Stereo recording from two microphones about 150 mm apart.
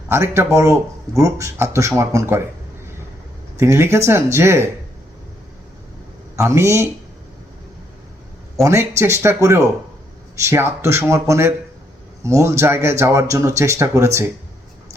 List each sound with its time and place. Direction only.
0.1 s speech: 20° right (ahead or behind)
3.6 s speech: 20° right (ahead or behind)
6.3 s speech: 20° right (ahead or behind)
8.6 s speech: 15° right (ahead or behind)